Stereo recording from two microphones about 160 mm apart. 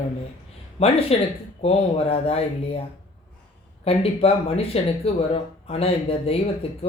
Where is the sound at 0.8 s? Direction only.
40° left (ahead or behind).